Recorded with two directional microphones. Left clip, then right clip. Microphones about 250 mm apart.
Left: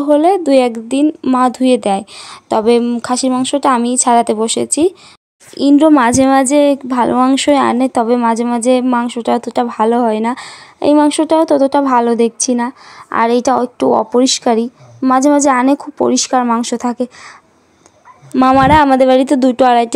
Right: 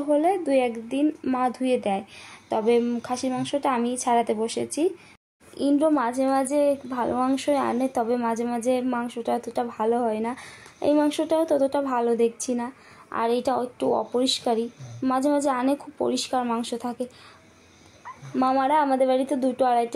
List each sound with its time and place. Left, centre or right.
0.0 s a child's voice: left
18.3 s a child's voice: left